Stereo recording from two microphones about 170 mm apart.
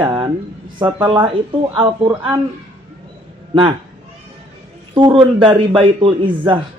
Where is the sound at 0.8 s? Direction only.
10° right (ahead or behind).